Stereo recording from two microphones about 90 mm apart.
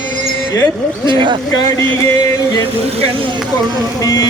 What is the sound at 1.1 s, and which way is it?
Speech, 65° right (ahead or behind).